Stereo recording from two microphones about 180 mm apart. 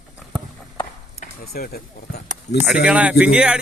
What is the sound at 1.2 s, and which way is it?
Speech, 60° left (ahead or behind).